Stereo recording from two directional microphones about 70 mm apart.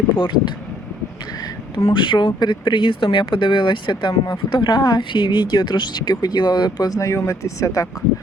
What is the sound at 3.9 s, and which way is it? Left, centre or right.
Speech, left.